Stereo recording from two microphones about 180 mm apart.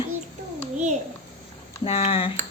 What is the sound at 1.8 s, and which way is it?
Speech, 35° left (ahead or behind).